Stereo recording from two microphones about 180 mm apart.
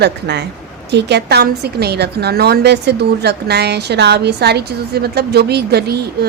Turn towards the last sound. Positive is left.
turn(degrees=-65)  # may be behind; listen again after turning